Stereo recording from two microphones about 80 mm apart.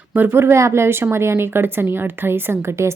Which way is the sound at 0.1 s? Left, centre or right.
Right.